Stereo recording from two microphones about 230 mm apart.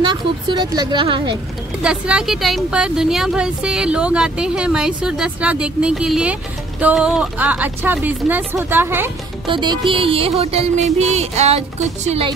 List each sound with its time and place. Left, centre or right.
0.0 s music: centre
1.8 s speech: centre
9.5 s music: right